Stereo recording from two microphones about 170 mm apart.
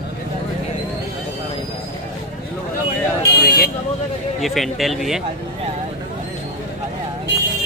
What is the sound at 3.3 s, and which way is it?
Speech, 65° left (ahead or behind).